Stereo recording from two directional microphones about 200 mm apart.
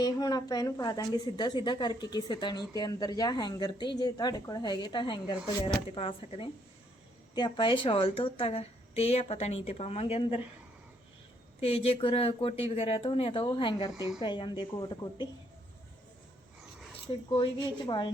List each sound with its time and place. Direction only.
0.0 s a woman's voice: 20° left (ahead or behind)
11.6 s a woman's voice: 30° left (ahead or behind)
17.1 s a woman's voice: 25° left (ahead or behind)